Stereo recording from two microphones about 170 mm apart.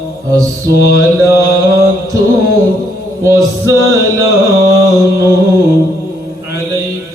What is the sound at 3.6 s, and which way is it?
Music, 20° right (ahead or behind).